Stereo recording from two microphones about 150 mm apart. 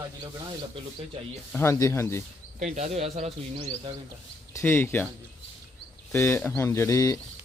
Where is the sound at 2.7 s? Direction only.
45° right (ahead or behind).